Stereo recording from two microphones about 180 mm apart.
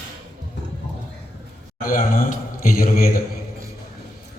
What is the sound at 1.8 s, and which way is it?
A man's voice, 50° left (ahead or behind).